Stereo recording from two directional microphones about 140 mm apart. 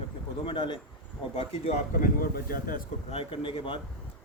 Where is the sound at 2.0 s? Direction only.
90° left.